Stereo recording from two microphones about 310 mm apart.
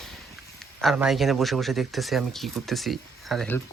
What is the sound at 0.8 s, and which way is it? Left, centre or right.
Speech, centre.